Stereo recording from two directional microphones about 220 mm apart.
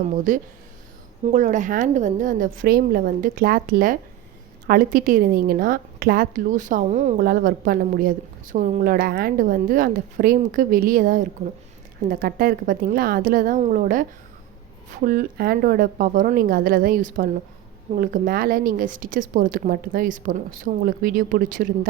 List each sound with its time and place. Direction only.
0.3 s a woman's voice: 35° right (ahead or behind)